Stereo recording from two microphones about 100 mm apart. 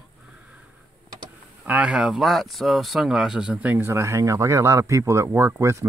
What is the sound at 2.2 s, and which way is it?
Speech, centre (ahead or behind).